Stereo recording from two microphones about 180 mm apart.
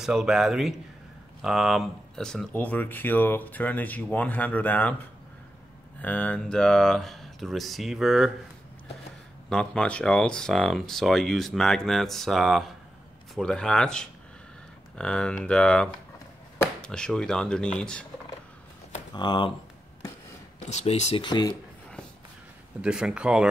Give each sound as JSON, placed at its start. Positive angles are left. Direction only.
{"t": 0.0, "sound": "speech", "side_deg": 0}
{"t": 5.9, "sound": "speech", "side_deg": 5}
{"t": 9.5, "sound": "speech", "side_deg": 5}
{"t": 19.1, "sound": "speech", "side_deg": 25}
{"t": 20.5, "sound": "speech", "side_deg": 40}
{"t": 21.2, "sound": "speech", "side_deg": 25}
{"t": 22.8, "sound": "speech", "side_deg": -5}